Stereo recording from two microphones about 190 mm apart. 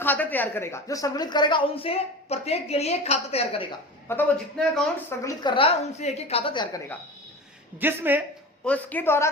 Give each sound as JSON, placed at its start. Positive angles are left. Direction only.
{"t": 0.0, "sound": "a woman's voice", "side_deg": 10}
{"t": 4.1, "sound": "speech", "side_deg": 5}
{"t": 5.2, "sound": "a woman's voice", "side_deg": 20}
{"t": 7.8, "sound": "speech", "side_deg": -10}
{"t": 8.6, "sound": "speech", "side_deg": 10}